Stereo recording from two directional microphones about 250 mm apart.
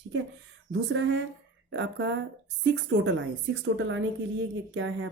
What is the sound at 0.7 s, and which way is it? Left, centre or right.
Speech, right.